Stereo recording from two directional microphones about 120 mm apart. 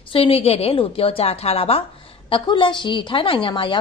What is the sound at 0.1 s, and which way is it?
A woman's voice, 50° left (ahead or behind).